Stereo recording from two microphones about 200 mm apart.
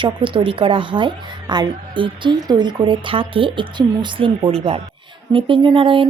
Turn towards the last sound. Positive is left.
turn(degrees=-25)  # may be behind; listen again after turning